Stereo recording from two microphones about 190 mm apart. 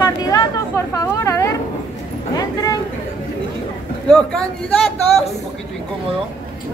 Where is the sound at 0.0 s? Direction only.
20° left (ahead or behind).